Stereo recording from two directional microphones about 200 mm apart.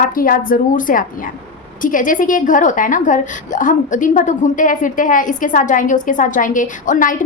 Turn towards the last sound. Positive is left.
turn(degrees=40)  # may be behind; listen again after turning